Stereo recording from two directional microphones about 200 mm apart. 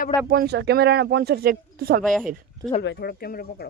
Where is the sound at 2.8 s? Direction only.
55° left (ahead or behind).